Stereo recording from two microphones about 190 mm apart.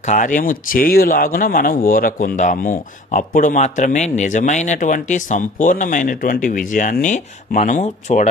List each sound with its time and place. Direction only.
0.0 s speech: 40° left (ahead or behind)